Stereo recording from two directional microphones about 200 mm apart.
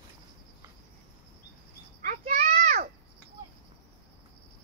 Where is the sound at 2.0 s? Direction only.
35° right (ahead or behind).